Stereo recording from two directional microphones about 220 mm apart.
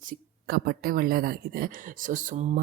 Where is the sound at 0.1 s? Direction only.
40° right (ahead or behind).